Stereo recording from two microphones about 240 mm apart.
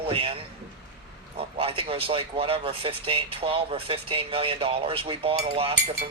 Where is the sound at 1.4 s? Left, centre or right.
Right.